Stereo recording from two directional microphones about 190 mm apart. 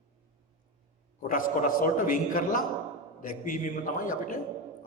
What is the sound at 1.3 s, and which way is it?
A man's voice, 45° left (ahead or behind).